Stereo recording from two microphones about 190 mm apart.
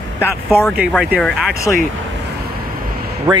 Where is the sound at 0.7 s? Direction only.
5° right (ahead or behind).